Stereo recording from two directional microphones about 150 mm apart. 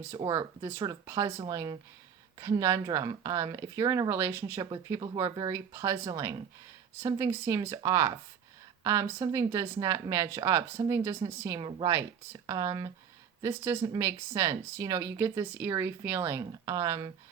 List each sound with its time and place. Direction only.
0.3 s speech: 15° right (ahead or behind)
4.6 s speech: 25° right (ahead or behind)